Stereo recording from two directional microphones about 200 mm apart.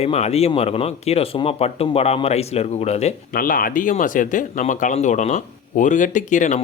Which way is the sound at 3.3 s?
45° left (ahead or behind).